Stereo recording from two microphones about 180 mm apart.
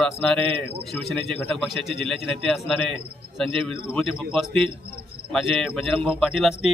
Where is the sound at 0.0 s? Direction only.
5° left (ahead or behind).